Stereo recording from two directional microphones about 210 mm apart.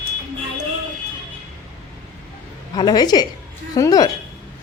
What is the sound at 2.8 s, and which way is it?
A woman's voice, 20° left (ahead or behind).